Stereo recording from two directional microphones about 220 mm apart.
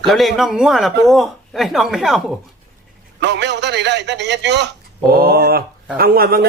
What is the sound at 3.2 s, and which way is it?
A man's voice, 50° right (ahead or behind).